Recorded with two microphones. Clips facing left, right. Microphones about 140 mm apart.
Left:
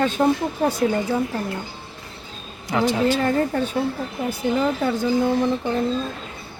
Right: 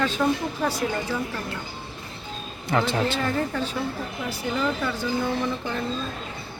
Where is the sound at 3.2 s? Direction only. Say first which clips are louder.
Left 5 dB; 50° left (ahead or behind).